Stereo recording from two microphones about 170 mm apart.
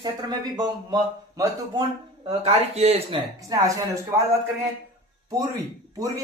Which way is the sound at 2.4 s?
35° right (ahead or behind).